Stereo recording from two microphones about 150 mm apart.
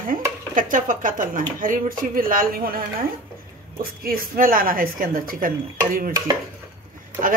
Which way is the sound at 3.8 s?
75° right (ahead or behind).